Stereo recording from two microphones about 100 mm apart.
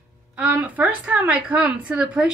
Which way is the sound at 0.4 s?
15° right (ahead or behind).